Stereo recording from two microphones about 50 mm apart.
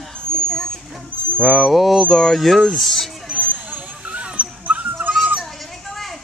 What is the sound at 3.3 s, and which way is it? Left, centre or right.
Dog, right.